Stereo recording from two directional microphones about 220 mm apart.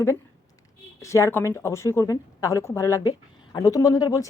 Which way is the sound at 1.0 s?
15° left (ahead or behind).